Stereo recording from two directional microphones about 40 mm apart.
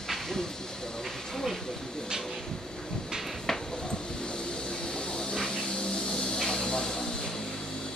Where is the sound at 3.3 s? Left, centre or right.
Centre.